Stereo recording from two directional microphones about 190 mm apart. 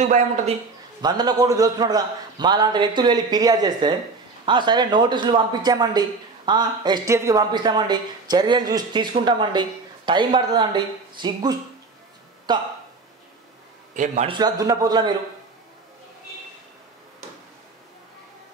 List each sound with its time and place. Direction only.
0.0 s speech: 35° right (ahead or behind)
1.0 s speech: 20° right (ahead or behind)
13.9 s speech: 40° right (ahead or behind)
14.3 s speech: 20° right (ahead or behind)